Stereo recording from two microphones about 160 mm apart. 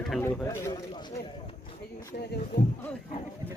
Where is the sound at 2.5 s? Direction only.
90° left.